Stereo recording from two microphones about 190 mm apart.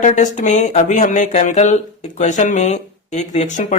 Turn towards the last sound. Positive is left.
turn(degrees=35)  # may be behind; listen again after turning